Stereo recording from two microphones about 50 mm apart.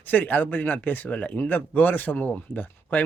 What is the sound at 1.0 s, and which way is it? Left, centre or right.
Speech, left.